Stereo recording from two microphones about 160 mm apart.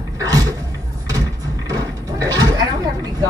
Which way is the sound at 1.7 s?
25° right (ahead or behind).